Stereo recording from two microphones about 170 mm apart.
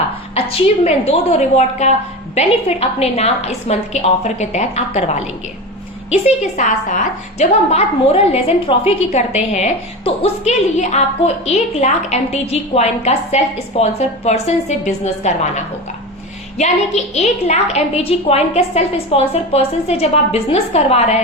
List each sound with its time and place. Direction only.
0.3 s a woman's voice: 35° left (ahead or behind)